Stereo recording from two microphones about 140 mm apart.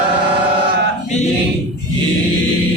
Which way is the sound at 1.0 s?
60° left (ahead or behind).